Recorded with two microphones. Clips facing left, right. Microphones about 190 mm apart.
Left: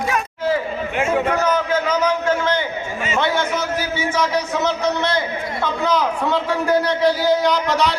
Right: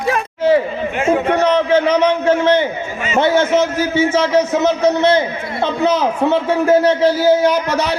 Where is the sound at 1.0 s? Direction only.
30° right (ahead or behind).